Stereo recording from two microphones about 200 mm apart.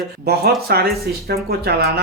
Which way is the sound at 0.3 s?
50° right (ahead or behind).